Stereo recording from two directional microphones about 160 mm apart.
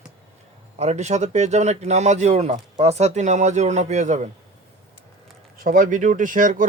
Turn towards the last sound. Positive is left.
turn(degrees=-55)  # may be behind; listen again after turning